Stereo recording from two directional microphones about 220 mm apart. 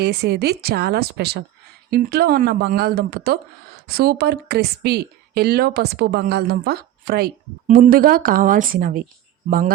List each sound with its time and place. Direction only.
0.0 s speech: 50° right (ahead or behind)